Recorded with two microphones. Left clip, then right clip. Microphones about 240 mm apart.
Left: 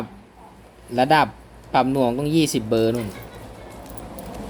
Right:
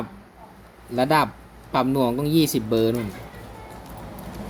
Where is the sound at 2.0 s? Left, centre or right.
Right.